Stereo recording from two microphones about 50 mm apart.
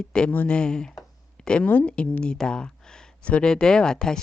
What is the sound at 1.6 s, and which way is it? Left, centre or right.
Speech, left.